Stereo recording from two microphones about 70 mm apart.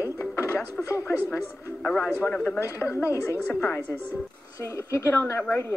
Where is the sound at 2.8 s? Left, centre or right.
Left.